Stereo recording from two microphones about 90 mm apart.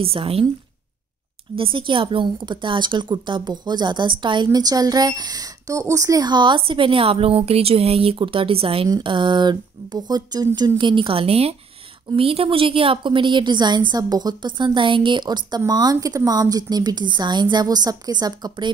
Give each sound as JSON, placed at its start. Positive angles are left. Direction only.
{"t": 0.0, "sound": "a woman's voice", "side_deg": -90}
{"t": 1.6, "sound": "a woman's voice", "side_deg": -65}
{"t": 6.2, "sound": "a woman's voice", "side_deg": -55}
{"t": 9.0, "sound": "a woman's voice", "side_deg": -60}
{"t": 10.8, "sound": "a woman's voice", "side_deg": -65}